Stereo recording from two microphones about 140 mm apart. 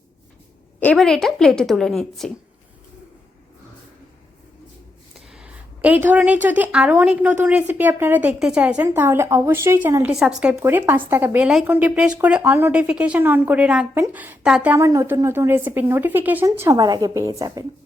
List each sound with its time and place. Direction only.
0.8 s a woman's voice: 5° left (ahead or behind)
5.3 s a woman's voice: 10° right (ahead or behind)
10.1 s a woman's voice: 5° right (ahead or behind)
10.6 s a woman's voice: 15° right (ahead or behind)
14.8 s speech: 20° right (ahead or behind)